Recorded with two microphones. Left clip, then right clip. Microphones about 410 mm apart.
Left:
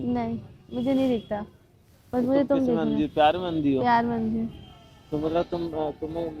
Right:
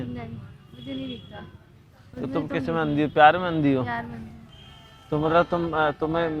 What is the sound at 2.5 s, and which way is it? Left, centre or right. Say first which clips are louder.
Speech: left 1 dB; right.